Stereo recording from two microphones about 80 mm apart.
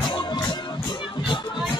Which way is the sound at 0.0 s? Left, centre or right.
Left.